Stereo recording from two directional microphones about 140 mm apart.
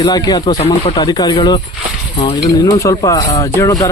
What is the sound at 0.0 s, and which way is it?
Speech, 30° left (ahead or behind).